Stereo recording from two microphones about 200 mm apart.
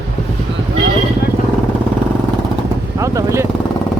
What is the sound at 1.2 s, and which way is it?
Vehicle, 50° left (ahead or behind).